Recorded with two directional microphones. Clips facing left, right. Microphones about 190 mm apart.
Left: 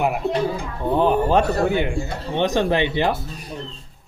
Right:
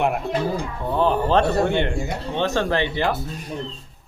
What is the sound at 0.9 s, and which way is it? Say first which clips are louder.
A man's voice: left 1 dB; 15° left (ahead or behind).